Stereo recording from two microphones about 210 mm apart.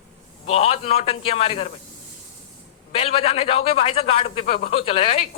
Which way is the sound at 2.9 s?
30° left (ahead or behind).